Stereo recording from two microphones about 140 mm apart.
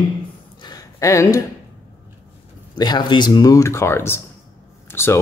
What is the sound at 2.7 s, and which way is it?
Speech, 30° left (ahead or behind).